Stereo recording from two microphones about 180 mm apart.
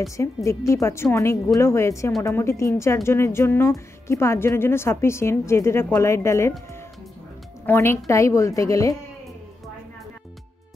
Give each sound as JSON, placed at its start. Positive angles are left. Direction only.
{"t": 0.2, "sound": "speech", "side_deg": 15}
{"t": 7.6, "sound": "speech", "side_deg": 10}